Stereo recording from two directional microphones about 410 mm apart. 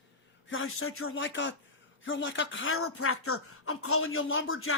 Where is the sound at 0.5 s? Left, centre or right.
Left.